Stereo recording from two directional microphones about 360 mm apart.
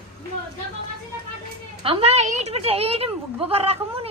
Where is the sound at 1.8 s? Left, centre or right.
Centre.